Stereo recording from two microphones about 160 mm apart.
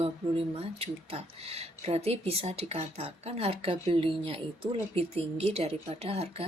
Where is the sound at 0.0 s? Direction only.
35° right (ahead or behind).